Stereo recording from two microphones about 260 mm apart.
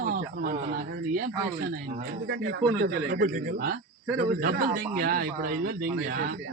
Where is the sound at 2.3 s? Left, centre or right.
Right.